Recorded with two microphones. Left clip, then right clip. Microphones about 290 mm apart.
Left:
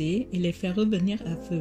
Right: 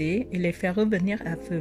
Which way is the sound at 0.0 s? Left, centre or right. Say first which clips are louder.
Right 2 dB; right.